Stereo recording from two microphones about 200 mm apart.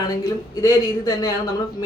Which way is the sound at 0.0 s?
20° left (ahead or behind).